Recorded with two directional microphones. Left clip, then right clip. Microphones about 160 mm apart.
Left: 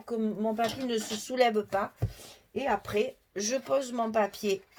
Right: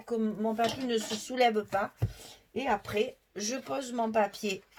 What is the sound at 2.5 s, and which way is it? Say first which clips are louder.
Speech: left 1 dB; 40° left (ahead or behind).